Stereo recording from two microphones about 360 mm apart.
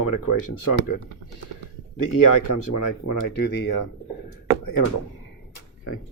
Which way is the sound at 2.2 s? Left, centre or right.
Left.